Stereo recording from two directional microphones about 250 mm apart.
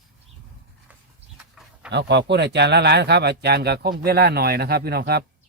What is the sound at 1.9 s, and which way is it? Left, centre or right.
Speech, right.